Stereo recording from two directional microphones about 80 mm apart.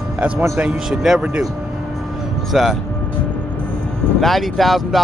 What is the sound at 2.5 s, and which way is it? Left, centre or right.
Speech, centre.